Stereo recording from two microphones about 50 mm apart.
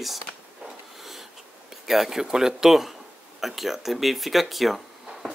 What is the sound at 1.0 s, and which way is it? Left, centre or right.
Wheeze, centre.